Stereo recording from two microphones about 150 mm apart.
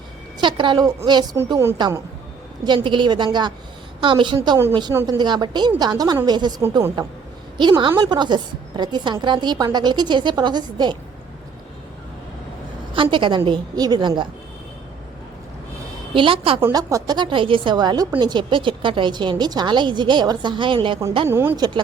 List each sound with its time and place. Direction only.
0.3 s a woman's voice: 30° right (ahead or behind)
1.5 s a woman's voice: 20° right (ahead or behind)
2.6 s a woman's voice: 35° right (ahead or behind)
12.9 s a woman's voice: 35° right (ahead or behind)
16.1 s a woman's voice: 35° right (ahead or behind)
16.7 s a woman's voice: 25° right (ahead or behind)
21.2 s speech: 15° right (ahead or behind)
21.5 s a woman's voice: 25° right (ahead or behind)